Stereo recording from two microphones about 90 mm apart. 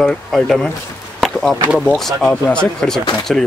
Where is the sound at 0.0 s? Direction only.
5° left (ahead or behind).